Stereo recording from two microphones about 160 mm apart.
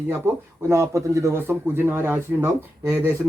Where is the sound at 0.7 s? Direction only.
20° right (ahead or behind).